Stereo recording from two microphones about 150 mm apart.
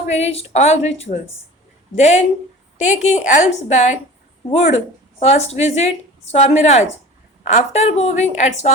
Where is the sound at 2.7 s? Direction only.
50° left (ahead or behind).